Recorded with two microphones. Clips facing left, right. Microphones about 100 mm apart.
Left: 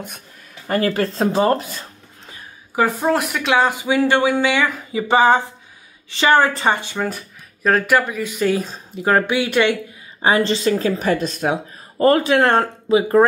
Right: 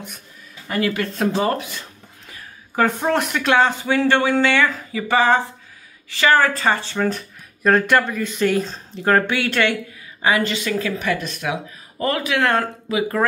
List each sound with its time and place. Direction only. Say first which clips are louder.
0.7 s speech: left 3 dB; 40° left (ahead or behind)
2.7 s speech: left 1 dB; 10° left (ahead or behind)
10.2 s speech: left 3 dB; 30° left (ahead or behind)